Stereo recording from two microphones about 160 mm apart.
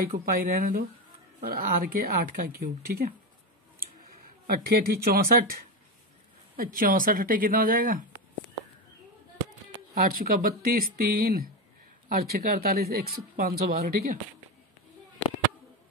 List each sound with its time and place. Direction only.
0.0 s speech: 65° right (ahead or behind)
4.5 s speech: 70° right (ahead or behind)
9.9 s speech: 65° right (ahead or behind)